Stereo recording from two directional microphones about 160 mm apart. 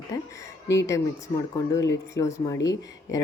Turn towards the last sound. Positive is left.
turn(degrees=20)  # may be behind; listen again after turning